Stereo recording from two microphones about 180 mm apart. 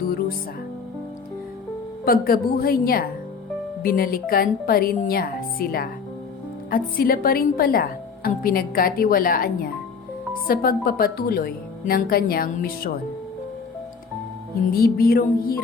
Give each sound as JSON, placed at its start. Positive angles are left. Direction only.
{"t": 2.0, "sound": "a woman's voice", "side_deg": 55}
{"t": 14.7, "sound": "speech", "side_deg": 55}